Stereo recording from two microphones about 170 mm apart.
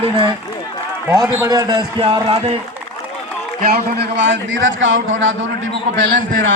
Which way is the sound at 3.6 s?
65° right (ahead or behind).